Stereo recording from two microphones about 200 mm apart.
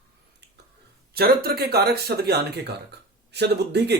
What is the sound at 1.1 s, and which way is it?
Speech, 50° right (ahead or behind).